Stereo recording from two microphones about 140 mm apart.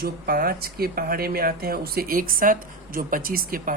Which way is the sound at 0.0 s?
90° right.